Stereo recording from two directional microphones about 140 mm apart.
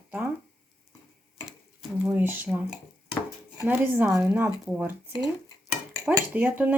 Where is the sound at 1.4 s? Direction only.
5° right (ahead or behind).